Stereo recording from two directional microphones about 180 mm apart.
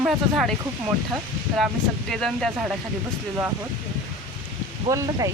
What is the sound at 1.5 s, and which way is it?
Speech, centre (ahead or behind).